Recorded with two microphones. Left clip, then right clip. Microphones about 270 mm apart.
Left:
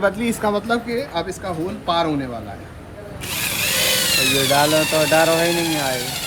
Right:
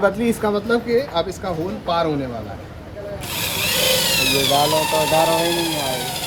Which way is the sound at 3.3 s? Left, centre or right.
Centre.